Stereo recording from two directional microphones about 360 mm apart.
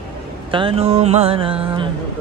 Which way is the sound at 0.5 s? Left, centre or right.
Centre.